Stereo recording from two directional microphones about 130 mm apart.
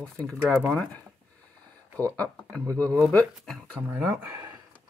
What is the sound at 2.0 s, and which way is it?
Speech, 10° left (ahead or behind).